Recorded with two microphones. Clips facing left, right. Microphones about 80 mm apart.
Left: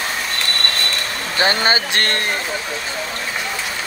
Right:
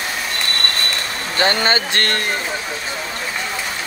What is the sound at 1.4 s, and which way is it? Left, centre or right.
Speech, centre.